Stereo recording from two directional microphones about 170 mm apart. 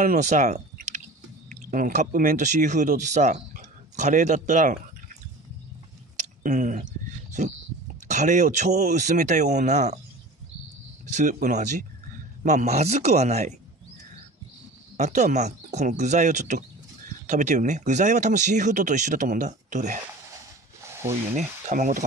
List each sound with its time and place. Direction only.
0.0 s speech: 45° right (ahead or behind)
6.4 s speech: 50° right (ahead or behind)
8.1 s speech: 45° right (ahead or behind)
11.1 s speech: 50° right (ahead or behind)
15.0 s speech: 45° right (ahead or behind)
20.8 s a sound: 15° right (ahead or behind)
21.4 s speech: 45° right (ahead or behind)